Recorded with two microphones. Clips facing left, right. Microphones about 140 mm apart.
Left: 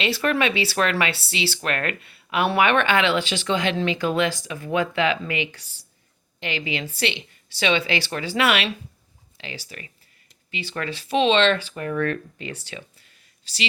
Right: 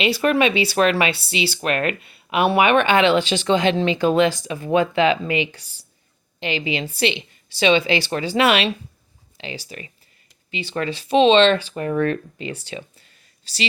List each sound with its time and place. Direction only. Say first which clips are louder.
0.0 s speech: right 4 dB; 15° right (ahead or behind)
13.4 s speech: right 3 dB; 35° right (ahead or behind)